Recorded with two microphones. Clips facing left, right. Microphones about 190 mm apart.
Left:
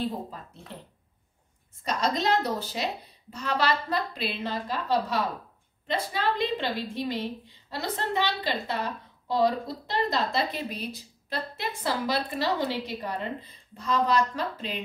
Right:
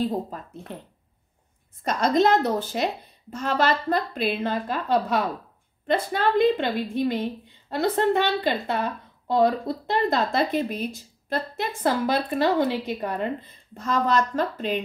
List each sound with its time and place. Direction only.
1.8 s a woman's voice: 50° right (ahead or behind)